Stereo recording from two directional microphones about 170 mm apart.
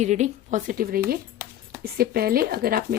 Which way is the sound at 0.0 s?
45° right (ahead or behind).